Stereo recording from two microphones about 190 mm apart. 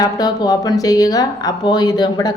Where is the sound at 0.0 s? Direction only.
20° left (ahead or behind).